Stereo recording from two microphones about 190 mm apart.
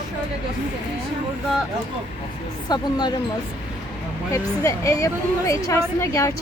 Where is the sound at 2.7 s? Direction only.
20° left (ahead or behind).